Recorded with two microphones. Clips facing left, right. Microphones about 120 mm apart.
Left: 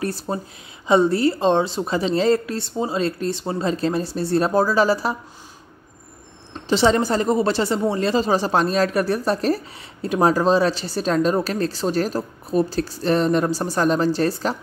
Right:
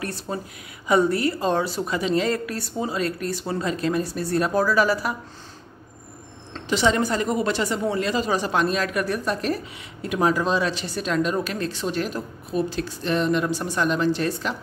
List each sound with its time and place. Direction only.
0.0 s a woman's voice: 30° left (ahead or behind)
6.7 s speech: 30° left (ahead or behind)